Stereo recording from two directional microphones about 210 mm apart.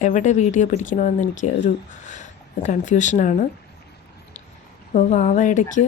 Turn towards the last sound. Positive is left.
turn(degrees=35)  # may be behind; listen again after turning